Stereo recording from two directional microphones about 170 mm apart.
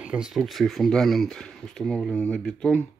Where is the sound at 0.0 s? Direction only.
5° right (ahead or behind).